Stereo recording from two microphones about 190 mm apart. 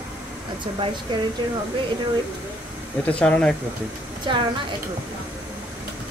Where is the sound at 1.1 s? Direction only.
20° right (ahead or behind).